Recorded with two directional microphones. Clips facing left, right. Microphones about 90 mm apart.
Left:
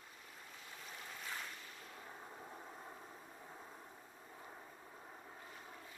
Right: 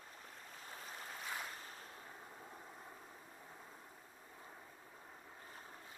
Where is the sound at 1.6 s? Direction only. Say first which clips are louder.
Right 1 dB; 35° right (ahead or behind).